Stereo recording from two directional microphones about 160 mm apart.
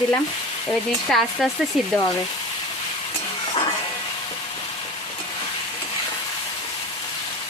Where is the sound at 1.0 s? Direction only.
Centre (ahead or behind).